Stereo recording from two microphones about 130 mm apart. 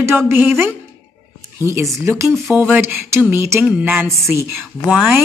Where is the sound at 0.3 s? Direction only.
15° right (ahead or behind).